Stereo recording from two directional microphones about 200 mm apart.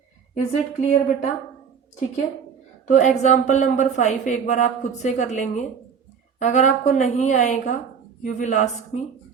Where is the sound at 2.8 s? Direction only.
40° left (ahead or behind).